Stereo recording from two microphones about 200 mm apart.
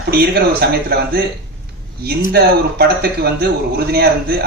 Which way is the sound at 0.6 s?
50° right (ahead or behind).